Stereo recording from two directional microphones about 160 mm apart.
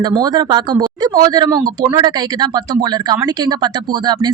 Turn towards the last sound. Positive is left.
turn(degrees=-25)  # may be behind; listen again after turning